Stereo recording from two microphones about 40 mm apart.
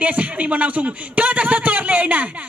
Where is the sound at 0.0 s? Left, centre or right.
Right.